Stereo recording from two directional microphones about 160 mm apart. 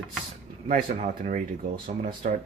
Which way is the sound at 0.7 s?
55° right (ahead or behind).